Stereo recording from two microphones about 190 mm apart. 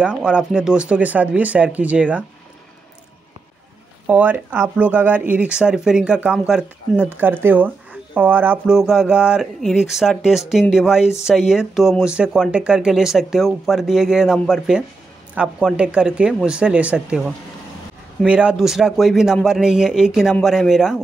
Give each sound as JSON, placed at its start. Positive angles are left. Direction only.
{"t": 0.0, "sound": "speech", "side_deg": -5}
{"t": 4.1, "sound": "speech", "side_deg": -10}